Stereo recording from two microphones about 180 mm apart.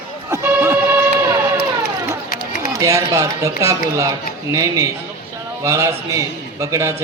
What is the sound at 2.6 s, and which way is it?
A man's voice, 20° right (ahead or behind).